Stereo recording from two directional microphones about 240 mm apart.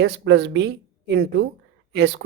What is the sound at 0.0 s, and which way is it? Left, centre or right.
A woman's voice, right.